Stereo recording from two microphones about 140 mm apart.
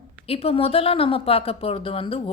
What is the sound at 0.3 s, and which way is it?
Speech, 45° left (ahead or behind).